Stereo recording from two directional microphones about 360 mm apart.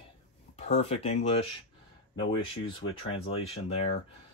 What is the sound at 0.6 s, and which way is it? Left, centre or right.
Speech, centre.